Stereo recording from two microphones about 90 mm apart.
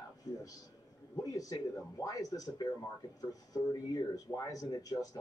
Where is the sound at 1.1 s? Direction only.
40° left (ahead or behind).